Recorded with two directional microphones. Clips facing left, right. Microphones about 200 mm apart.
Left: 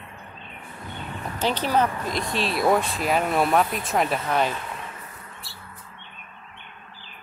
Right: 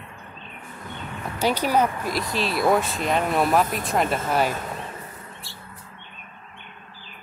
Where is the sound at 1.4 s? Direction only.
10° right (ahead or behind).